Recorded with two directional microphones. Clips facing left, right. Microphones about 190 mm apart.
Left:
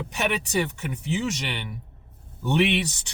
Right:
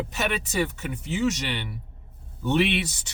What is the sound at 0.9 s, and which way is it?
Speech, 15° left (ahead or behind).